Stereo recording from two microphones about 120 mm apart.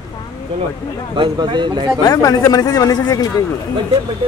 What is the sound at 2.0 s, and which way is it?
A man's voice, 30° left (ahead or behind).